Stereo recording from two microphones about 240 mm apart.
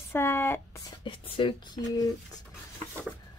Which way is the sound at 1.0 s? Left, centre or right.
Left.